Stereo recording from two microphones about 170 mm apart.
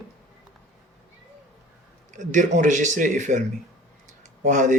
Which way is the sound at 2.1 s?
45° right (ahead or behind).